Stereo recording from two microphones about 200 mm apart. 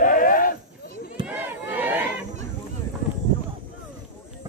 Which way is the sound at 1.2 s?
10° right (ahead or behind).